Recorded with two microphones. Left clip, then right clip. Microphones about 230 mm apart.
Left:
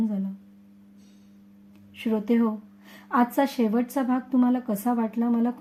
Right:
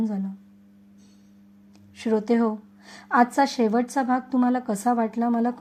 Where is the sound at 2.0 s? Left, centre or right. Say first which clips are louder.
Right 3 dB; centre.